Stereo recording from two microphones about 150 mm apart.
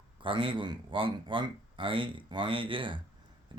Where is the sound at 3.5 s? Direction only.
35° right (ahead or behind).